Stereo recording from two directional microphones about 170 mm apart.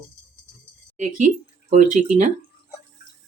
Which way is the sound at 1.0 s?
45° right (ahead or behind).